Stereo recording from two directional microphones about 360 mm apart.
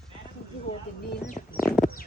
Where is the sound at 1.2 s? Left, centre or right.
Left.